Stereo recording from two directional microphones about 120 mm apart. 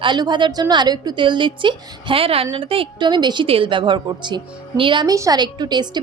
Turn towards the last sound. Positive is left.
turn(degrees=-35)  # may be behind; listen again after turning